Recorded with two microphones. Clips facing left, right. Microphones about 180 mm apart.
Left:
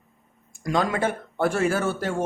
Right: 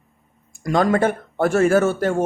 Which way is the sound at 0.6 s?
50° right (ahead or behind).